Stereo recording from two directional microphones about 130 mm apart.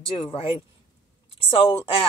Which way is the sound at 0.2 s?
40° left (ahead or behind).